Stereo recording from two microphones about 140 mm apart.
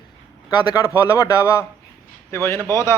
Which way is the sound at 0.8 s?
20° left (ahead or behind).